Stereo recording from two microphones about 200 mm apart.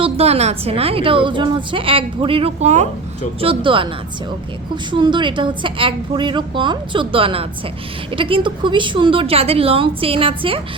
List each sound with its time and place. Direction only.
0.0 s a woman's voice: 30° right (ahead or behind)
4.9 s a woman's voice: 25° right (ahead or behind)